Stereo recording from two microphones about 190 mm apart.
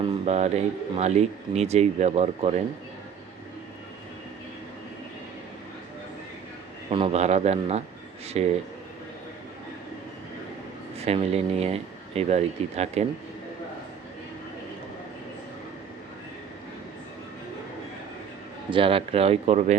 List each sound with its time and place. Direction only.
0.0 s speech: 30° right (ahead or behind)
6.9 s speech: 30° right (ahead or behind)
10.9 s speech: 35° right (ahead or behind)
18.7 s speech: 30° right (ahead or behind)